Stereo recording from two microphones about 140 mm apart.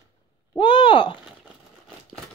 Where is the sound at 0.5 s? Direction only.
35° left (ahead or behind).